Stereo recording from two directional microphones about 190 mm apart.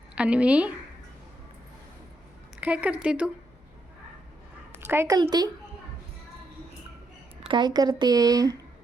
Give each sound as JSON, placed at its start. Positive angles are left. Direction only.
{"t": 0.2, "sound": "speech", "side_deg": -5}
{"t": 2.6, "sound": "speech", "side_deg": -5}
{"t": 4.9, "sound": "speech", "side_deg": -15}
{"t": 7.4, "sound": "speech", "side_deg": -25}